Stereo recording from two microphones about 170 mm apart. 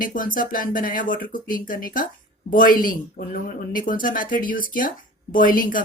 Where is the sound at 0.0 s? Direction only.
55° left (ahead or behind).